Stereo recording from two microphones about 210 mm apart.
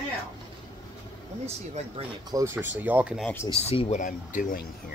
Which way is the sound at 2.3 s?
10° right (ahead or behind).